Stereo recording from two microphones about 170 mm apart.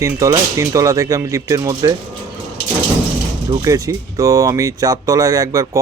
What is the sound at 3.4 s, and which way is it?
Speech, 20° right (ahead or behind).